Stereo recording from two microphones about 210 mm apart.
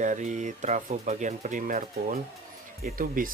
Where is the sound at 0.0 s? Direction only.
35° right (ahead or behind).